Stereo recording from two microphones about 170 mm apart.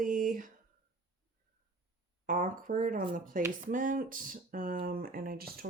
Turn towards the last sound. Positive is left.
turn(degrees=-65)  # may be behind; listen again after turning